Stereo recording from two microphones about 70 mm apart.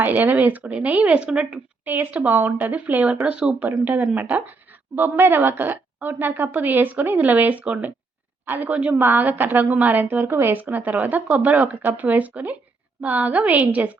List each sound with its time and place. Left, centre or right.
0.0 s a woman's voice: right
1.8 s a woman's voice: right